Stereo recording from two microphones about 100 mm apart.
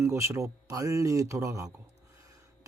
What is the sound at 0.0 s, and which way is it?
Speech, 30° right (ahead or behind).